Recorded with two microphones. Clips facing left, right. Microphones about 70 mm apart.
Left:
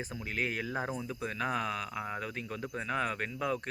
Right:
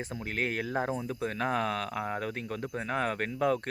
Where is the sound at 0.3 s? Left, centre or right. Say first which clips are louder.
Right 2 dB; right.